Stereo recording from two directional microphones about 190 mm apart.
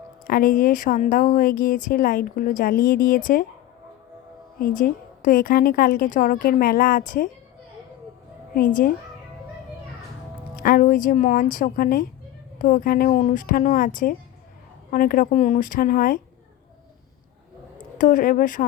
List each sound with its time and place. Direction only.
0.3 s a woman's voice: 50° left (ahead or behind)
4.6 s a woman's voice: 45° left (ahead or behind)
8.5 s a woman's voice: 50° left (ahead or behind)
10.6 s a woman's voice: 50° left (ahead or behind)
17.9 s a woman's voice: 45° left (ahead or behind)